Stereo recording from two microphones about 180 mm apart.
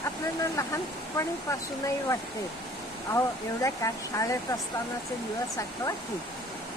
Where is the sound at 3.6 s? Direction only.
20° left (ahead or behind).